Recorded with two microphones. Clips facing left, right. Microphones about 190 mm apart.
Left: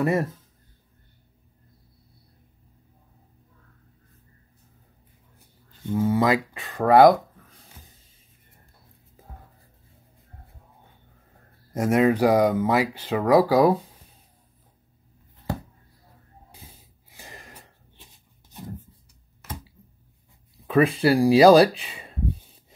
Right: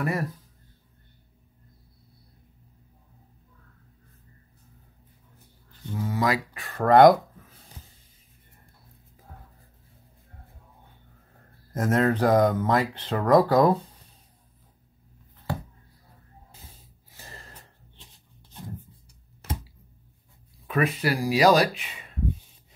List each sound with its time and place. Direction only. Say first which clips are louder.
0.0 s speech: left 5 dB; 25° left (ahead or behind)
5.9 s speech: left 5 dB; 25° left (ahead or behind); by 7.5 s centre (ahead or behind)
11.7 s speech: left 3 dB; 10° left (ahead or behind)
17.1 s a sound: left 2 dB; 15° left (ahead or behind)
19.4 s a sound: right 3 dB; 30° right (ahead or behind)
20.6 s speech: left 6 dB; 30° left (ahead or behind)